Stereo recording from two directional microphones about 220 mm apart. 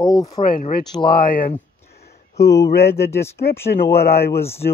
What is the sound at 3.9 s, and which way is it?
Speech, 45° left (ahead or behind).